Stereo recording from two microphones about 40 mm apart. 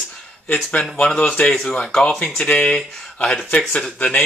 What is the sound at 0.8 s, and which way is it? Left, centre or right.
Speech, left.